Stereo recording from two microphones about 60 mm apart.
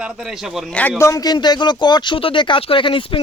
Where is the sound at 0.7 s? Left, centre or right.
Left.